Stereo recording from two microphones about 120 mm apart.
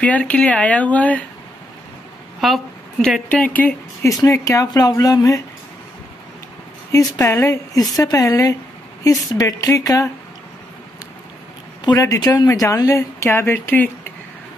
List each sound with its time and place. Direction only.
0.0 s speech: 10° left (ahead or behind)
2.4 s a woman's voice: centre (ahead or behind)
3.3 s speech: 10° left (ahead or behind)
4.0 s speech: 25° left (ahead or behind)
6.9 s speech: 30° left (ahead or behind)
11.8 s speech: 30° left (ahead or behind)